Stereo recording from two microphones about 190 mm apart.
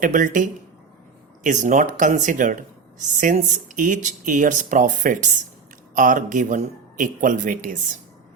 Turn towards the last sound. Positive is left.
turn(degrees=-45)  # may be behind; listen again after turning